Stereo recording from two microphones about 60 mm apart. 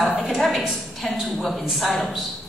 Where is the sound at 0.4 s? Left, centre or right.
Centre.